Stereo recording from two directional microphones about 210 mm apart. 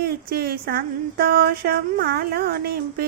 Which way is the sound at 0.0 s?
50° right (ahead or behind).